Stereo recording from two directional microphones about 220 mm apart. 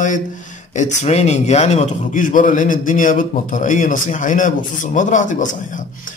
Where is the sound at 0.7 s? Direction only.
30° left (ahead or behind).